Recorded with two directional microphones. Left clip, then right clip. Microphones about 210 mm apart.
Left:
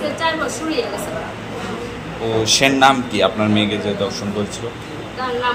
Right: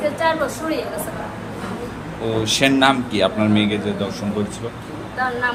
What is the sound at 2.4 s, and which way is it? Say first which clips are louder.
A man's voice: left 3 dB; 10° right (ahead or behind).